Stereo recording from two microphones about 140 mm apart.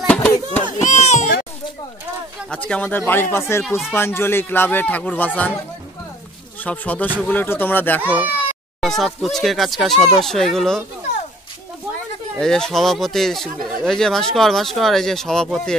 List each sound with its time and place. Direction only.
0.7 s baby cry: 55° left (ahead or behind)
2.5 s speech: 10° left (ahead or behind)
6.6 s speech: 10° left (ahead or behind)
8.0 s speech: 10° right (ahead or behind)
8.8 s speech: centre (ahead or behind)
12.4 s speech: 5° left (ahead or behind)